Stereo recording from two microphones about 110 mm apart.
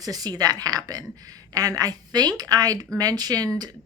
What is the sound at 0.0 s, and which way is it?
Speech, 35° right (ahead or behind).